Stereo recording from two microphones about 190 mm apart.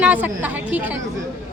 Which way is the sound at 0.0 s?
10° right (ahead or behind).